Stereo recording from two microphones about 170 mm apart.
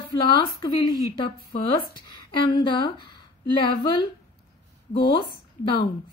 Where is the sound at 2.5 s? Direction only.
25° left (ahead or behind).